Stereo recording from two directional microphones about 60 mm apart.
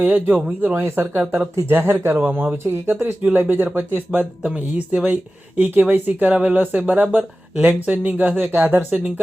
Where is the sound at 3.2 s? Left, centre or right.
Right.